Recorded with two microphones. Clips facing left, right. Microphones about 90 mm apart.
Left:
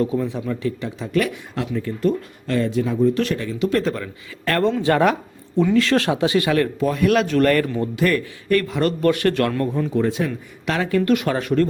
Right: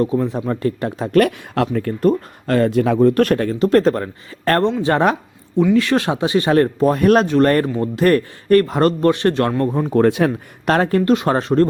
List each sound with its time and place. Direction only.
0.3 s speech: 40° right (ahead or behind)
4.6 s speech: 20° right (ahead or behind)
6.5 s speech: 40° right (ahead or behind)
7.3 s speech: 30° right (ahead or behind)
9.9 s speech: 65° right (ahead or behind)
10.8 s speech: 40° right (ahead or behind)
11.1 s speech: 30° right (ahead or behind)